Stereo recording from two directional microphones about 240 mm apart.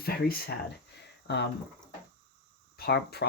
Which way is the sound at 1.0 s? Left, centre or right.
Left.